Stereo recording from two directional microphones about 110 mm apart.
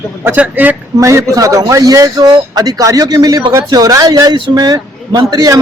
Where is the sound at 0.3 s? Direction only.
15° right (ahead or behind).